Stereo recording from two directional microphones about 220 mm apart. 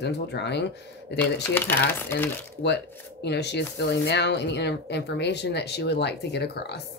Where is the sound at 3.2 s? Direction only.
50° left (ahead or behind).